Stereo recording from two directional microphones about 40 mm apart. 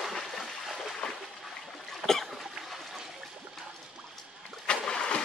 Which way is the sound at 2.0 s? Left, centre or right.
Centre.